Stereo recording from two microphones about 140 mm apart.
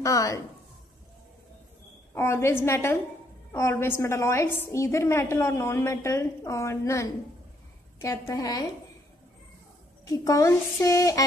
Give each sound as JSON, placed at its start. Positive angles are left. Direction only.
{"t": 0.0, "sound": "a woman's voice", "side_deg": 25}
{"t": 2.1, "sound": "a woman's voice", "side_deg": 20}
{"t": 10.0, "sound": "a woman's voice", "side_deg": 25}